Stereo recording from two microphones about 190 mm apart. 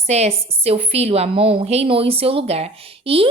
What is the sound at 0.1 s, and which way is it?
A woman's voice, 35° right (ahead or behind).